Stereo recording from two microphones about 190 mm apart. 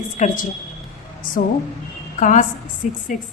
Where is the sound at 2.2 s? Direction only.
40° left (ahead or behind).